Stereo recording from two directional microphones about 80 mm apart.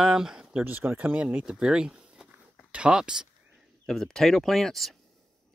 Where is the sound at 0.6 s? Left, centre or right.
Right; by 3.3 s centre.